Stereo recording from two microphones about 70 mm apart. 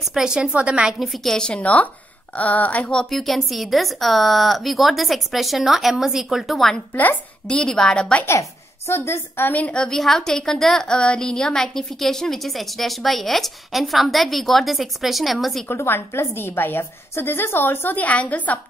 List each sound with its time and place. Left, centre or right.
0.0 s a woman's voice: centre
0.9 s a woman's voice: centre
3.0 s a woman's voice: centre
6.9 s speech: left
7.4 s a woman's voice: centre
8.3 s a woman's voice: left
9.5 s speech: centre
9.8 s a woman's voice: centre
15.7 s a woman's voice: left